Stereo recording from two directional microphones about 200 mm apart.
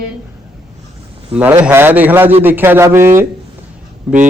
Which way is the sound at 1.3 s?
10° right (ahead or behind).